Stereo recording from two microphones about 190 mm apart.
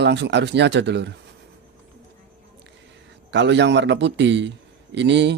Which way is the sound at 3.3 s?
65° right (ahead or behind).